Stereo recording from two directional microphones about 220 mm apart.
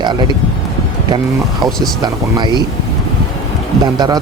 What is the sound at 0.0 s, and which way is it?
Speech, 20° right (ahead or behind).